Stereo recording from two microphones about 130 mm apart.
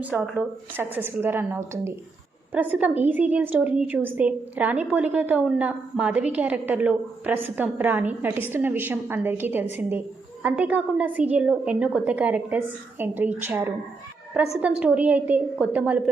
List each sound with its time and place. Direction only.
0.3 s a woman's voice: 15° right (ahead or behind)